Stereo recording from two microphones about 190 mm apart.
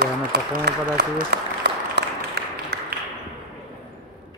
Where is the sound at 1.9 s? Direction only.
55° right (ahead or behind).